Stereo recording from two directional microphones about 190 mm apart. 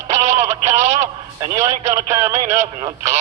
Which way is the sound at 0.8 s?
40° right (ahead or behind).